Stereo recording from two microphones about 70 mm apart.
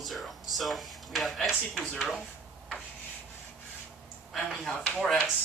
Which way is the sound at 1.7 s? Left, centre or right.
Centre.